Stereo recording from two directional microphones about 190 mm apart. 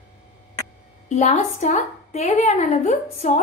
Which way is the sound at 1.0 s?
35° left (ahead or behind).